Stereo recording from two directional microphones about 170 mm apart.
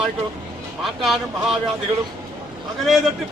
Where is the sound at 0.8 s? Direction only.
Centre (ahead or behind).